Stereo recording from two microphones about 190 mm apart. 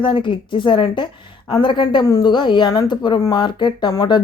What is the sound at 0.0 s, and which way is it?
A woman's voice, 25° left (ahead or behind).